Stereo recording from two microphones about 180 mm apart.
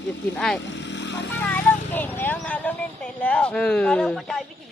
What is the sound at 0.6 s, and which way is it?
Motorcycle, 85° left.